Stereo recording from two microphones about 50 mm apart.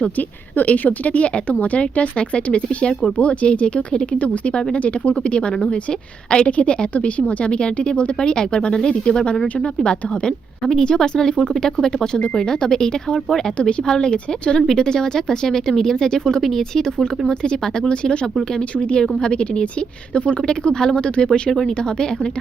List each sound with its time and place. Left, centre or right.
0.2 s a woman's voice: left; by 13.5 s centre
13.6 s a woman's voice: left
19.0 s a woman's voice: centre
19.3 s a woman's voice: centre